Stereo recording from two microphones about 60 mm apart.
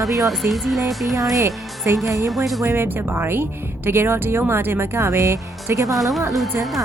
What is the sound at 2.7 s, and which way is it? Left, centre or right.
Speech, right.